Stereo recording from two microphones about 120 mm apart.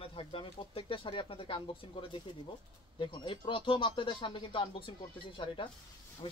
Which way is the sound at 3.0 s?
45° left (ahead or behind).